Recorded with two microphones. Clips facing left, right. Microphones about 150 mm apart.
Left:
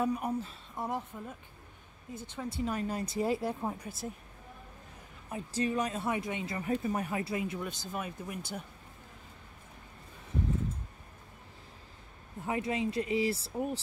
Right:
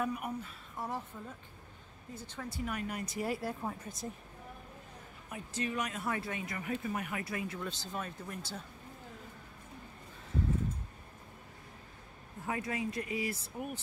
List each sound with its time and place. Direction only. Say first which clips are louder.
0.0 s speech: left 5 dB; 30° left (ahead or behind)
0.8 s speech: left 4 dB; 20° left (ahead or behind)
5.3 s speech: left 5 dB; 35° left (ahead or behind); by 8.6 s 15° left (ahead or behind)
12.4 s speech: left 4 dB; 20° left (ahead or behind)